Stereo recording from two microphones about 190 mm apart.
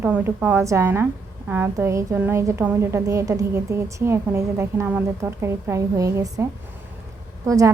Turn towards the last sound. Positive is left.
turn(degrees=-15)  # may be behind; listen again after turning